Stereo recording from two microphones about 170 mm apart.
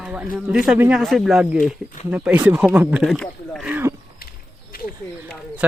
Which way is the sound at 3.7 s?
15° right (ahead or behind).